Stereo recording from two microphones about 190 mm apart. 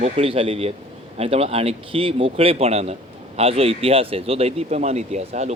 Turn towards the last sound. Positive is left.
turn(degrees=-35)  # may be behind; listen again after turning